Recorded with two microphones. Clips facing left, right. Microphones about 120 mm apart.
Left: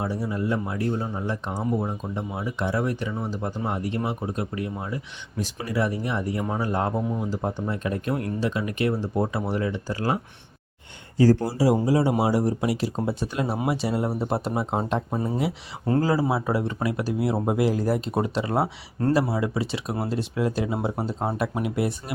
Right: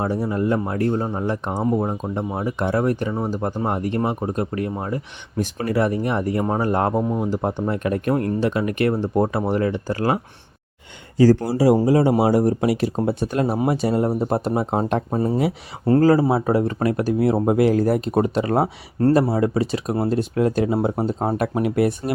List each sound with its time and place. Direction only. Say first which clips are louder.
0.0 s speech: right 6 dB; 50° right (ahead or behind)
11.4 s speech: right 5 dB; 60° right (ahead or behind)